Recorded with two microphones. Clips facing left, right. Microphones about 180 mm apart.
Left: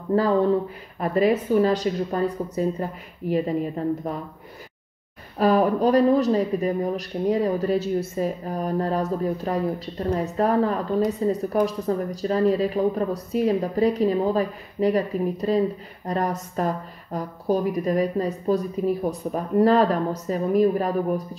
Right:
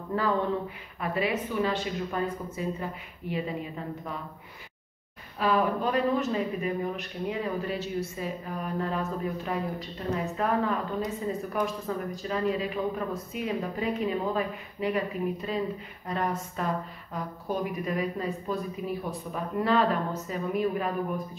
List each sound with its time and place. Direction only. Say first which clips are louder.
0.9 s a woman's voice: left 9 dB; 40° left (ahead or behind)
5.4 s a woman's voice: left 7 dB; 40° left (ahead or behind)